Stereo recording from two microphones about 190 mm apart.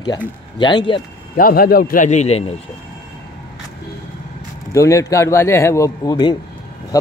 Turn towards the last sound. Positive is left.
turn(degrees=15)  # may be behind; listen again after turning